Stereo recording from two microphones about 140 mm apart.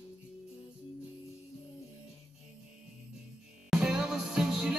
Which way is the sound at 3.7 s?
5° right (ahead or behind).